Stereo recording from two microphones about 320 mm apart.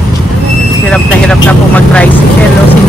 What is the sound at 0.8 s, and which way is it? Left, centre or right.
Speech, centre.